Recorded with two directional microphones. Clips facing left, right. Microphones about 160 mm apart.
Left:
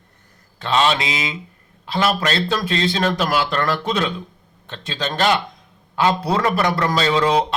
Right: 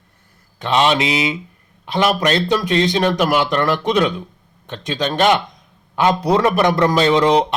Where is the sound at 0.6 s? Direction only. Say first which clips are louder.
Right 3 dB; 15° right (ahead or behind).